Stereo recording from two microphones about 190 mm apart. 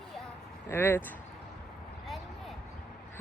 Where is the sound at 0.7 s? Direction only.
10° left (ahead or behind).